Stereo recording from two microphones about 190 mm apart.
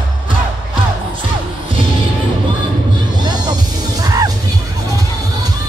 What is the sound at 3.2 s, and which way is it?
Music, 20° right (ahead or behind).